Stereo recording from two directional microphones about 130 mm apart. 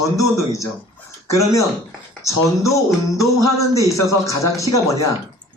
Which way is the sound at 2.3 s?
25° left (ahead or behind).